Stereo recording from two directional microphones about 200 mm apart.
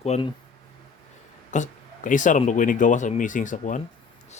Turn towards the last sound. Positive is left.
turn(degrees=40)  # may be behind; listen again after turning